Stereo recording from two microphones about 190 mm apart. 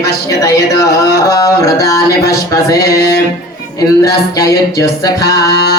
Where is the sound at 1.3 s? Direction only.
20° left (ahead or behind).